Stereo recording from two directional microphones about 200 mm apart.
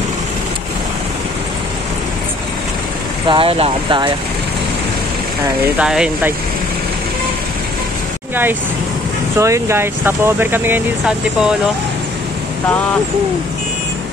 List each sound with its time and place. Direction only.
3.3 s speech: 30° right (ahead or behind)
5.8 s speech: 5° right (ahead or behind)
9.4 s speech: 15° right (ahead or behind)